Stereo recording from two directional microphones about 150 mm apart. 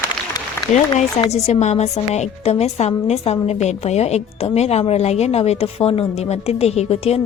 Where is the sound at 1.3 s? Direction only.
45° left (ahead or behind).